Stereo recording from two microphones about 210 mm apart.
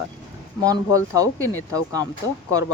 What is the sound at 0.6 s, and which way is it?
Speech, 15° right (ahead or behind).